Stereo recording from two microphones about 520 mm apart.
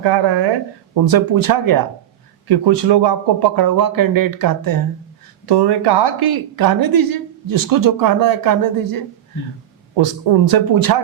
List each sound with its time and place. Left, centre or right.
0.0 s a woman's voice: right